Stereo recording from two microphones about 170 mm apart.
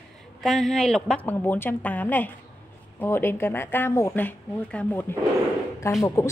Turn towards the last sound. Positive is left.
turn(degrees=15)  # may be behind; listen again after turning